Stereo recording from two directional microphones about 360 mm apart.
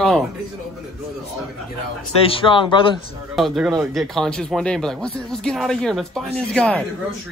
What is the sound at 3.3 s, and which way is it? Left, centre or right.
Speech, centre.